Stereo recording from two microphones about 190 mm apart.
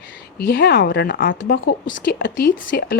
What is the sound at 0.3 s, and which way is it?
A woman's voice, 60° left (ahead or behind).